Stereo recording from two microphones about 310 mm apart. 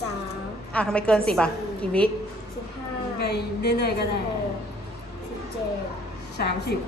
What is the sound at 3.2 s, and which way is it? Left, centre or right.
Speech, left.